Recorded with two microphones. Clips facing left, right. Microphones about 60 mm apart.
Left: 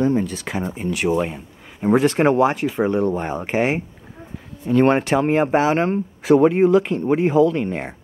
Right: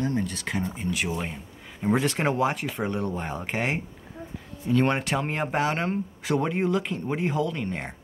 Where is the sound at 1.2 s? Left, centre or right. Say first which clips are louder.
Left 9 dB; centre.